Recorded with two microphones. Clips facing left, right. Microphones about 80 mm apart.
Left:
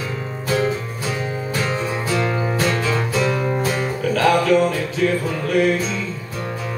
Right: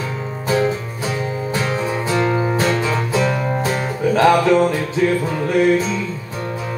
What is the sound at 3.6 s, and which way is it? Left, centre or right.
Music, right.